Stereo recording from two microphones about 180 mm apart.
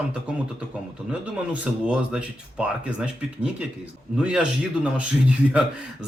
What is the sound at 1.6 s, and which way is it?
Speech, 5° right (ahead or behind).